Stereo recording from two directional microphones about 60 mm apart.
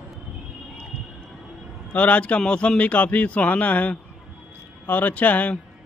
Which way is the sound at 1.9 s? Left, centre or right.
Left.